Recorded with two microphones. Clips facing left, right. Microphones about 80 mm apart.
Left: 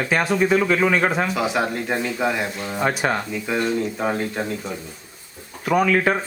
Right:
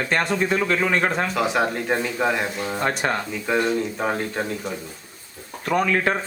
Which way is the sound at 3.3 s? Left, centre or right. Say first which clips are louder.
Right 1 dB; centre.